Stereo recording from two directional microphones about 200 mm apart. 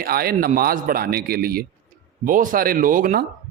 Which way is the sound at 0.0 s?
50° right (ahead or behind).